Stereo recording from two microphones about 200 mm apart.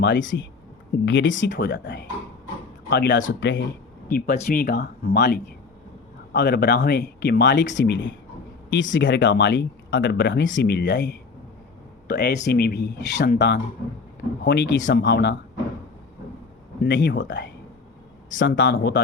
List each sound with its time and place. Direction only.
0.0 s speech: 65° left (ahead or behind)
1.5 s speech: 55° left (ahead or behind)
4.1 s speech: 45° left (ahead or behind); by 14.7 s 60° left (ahead or behind)
14.8 s speech: 40° left (ahead or behind)
15.0 s speech: 60° left (ahead or behind)
16.8 s speech: 60° left (ahead or behind)